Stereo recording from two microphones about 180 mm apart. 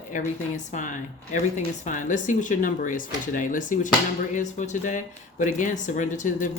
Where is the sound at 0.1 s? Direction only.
45° left (ahead or behind).